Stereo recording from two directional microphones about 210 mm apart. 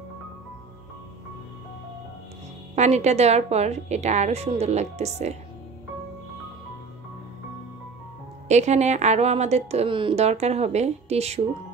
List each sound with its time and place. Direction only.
2.7 s a woman's voice: 35° right (ahead or behind)
8.5 s a woman's voice: 35° right (ahead or behind)